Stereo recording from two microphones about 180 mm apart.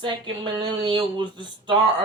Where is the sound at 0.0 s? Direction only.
25° right (ahead or behind).